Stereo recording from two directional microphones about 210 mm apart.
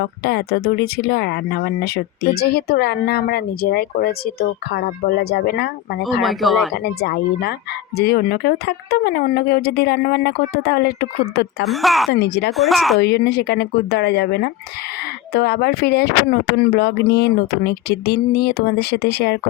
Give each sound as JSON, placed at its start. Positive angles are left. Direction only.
{"t": 0.0, "sound": "speech", "side_deg": 50}
{"t": 6.2, "sound": "speech", "side_deg": 0}
{"t": 6.7, "sound": "speech", "side_deg": 50}
{"t": 11.6, "sound": "speech", "side_deg": 0}
{"t": 12.1, "sound": "speech", "side_deg": 50}
{"t": 12.5, "sound": "speech", "side_deg": 0}
{"t": 13.0, "sound": "speech", "side_deg": 50}